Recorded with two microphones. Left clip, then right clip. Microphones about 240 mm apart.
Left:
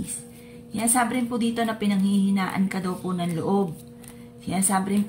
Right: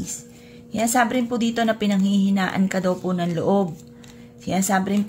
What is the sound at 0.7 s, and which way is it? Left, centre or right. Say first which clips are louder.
A woman's voice: right 4 dB; right.